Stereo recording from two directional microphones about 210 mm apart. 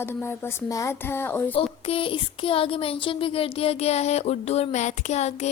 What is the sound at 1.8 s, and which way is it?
Speech, 25° left (ahead or behind).